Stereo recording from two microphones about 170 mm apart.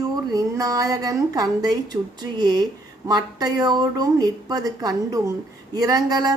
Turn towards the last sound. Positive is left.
turn(degrees=-25)  # may be behind; listen again after turning